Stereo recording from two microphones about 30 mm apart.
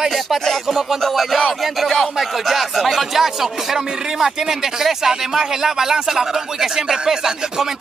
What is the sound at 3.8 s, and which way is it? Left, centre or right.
Speech, right.